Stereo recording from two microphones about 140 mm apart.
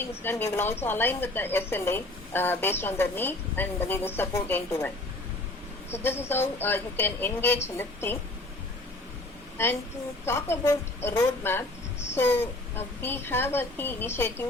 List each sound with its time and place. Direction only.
0.1 s a woman's voice: 15° left (ahead or behind)
5.9 s a woman's voice: 15° left (ahead or behind)
10.5 s a woman's voice: 20° left (ahead or behind)